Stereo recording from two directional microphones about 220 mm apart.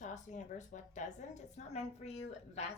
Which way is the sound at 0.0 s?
35° left (ahead or behind).